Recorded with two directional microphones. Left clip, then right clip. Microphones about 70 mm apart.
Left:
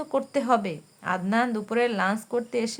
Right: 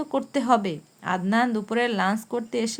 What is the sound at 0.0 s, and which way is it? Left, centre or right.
Speech, right.